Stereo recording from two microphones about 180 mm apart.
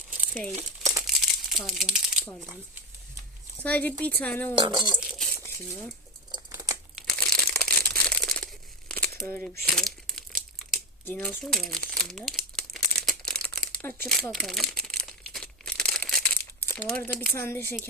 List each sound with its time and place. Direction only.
0.1 s crumpling: 10° right (ahead or behind)
3.6 s speech: 10° left (ahead or behind)
4.5 s speech: 25° right (ahead or behind)
4.9 s a sound: centre (ahead or behind)
6.3 s crumpling: 20° right (ahead or behind)
6.9 s crumpling: 5° left (ahead or behind)
11.0 s speech: 10° left (ahead or behind)
13.1 s crumpling: 5° left (ahead or behind)
16.6 s speech: 5° left (ahead or behind)